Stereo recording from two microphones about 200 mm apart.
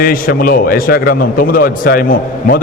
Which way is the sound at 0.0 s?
45° left (ahead or behind).